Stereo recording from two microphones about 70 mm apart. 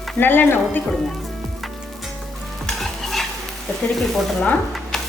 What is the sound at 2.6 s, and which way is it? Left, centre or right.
Stir, centre.